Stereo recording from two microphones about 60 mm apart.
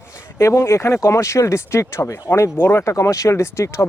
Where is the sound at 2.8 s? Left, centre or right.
Left.